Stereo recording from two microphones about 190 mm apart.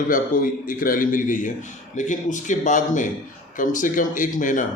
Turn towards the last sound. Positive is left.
turn(degrees=45)  # may be behind; listen again after turning